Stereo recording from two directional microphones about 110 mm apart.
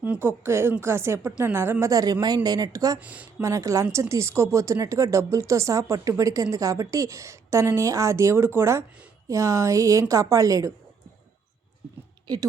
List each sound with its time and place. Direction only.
0.0 s a woman's voice: 20° right (ahead or behind)
3.0 s speech: 15° right (ahead or behind)
3.4 s speech: 30° right (ahead or behind)